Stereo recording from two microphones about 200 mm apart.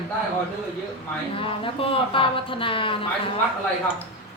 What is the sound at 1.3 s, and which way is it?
A woman's voice, 25° left (ahead or behind).